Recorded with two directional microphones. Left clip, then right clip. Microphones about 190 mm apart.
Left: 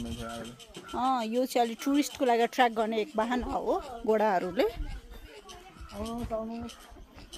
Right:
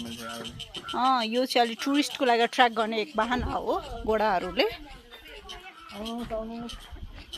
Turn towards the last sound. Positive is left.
turn(degrees=10)  # may be behind; listen again after turning